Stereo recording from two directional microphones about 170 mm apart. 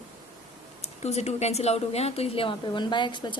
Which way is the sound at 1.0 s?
40° left (ahead or behind).